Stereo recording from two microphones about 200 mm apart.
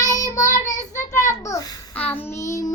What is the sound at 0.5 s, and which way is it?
Child singing, 40° left (ahead or behind).